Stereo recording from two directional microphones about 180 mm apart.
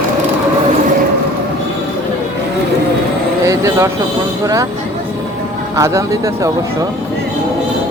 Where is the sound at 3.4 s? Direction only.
15° right (ahead or behind).